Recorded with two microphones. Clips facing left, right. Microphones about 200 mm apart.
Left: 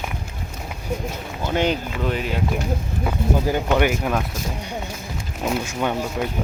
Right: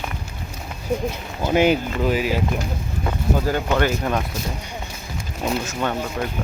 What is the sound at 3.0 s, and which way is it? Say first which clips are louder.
Speech: even; 15° left (ahead or behind).